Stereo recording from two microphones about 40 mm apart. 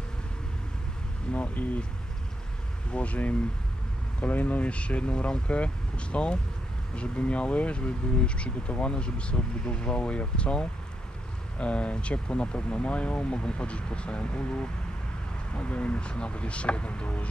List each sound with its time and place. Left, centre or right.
1.3 s speech: left
2.9 s speech: left